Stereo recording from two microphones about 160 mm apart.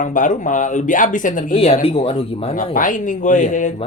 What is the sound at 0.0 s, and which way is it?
Speech, 55° left (ahead or behind).